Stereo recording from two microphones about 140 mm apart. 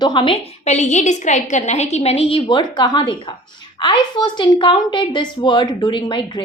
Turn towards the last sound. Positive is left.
turn(degrees=35)  # may be behind; listen again after turning